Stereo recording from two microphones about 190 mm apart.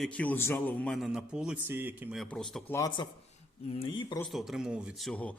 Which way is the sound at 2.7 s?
20° left (ahead or behind).